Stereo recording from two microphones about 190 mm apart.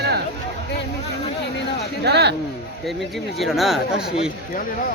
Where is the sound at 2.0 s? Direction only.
60° right (ahead or behind).